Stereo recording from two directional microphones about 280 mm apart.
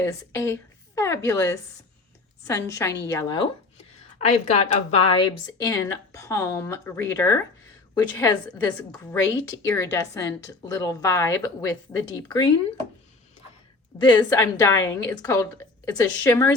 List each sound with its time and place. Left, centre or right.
0.0 s speech: centre
4.2 s speech: left
14.0 s speech: centre